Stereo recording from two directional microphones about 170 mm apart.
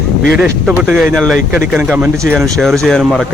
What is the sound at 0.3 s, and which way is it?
A man's voice, 5° right (ahead or behind).